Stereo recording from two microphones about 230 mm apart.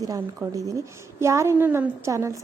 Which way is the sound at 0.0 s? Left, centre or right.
Centre.